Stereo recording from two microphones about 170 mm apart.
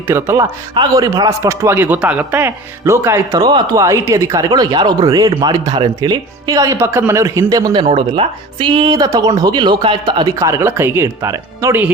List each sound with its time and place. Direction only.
0.1 s a man's voice: 15° right (ahead or behind)